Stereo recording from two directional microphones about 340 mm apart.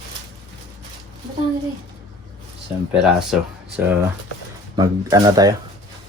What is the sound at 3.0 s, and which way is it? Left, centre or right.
Speech, centre.